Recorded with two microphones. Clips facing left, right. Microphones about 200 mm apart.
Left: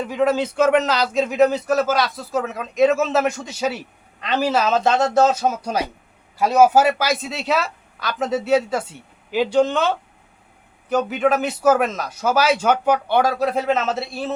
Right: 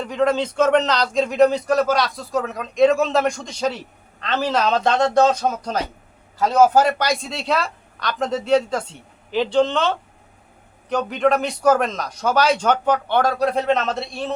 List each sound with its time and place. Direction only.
0.0 s speech: 5° left (ahead or behind)